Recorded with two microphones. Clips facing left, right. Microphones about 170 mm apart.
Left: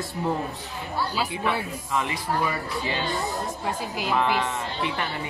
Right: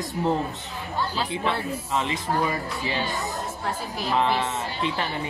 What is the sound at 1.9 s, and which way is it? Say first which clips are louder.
Speech: even; 25° right (ahead or behind).